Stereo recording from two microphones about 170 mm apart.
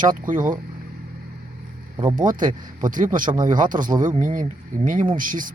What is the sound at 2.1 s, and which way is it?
A man's voice, 50° right (ahead or behind).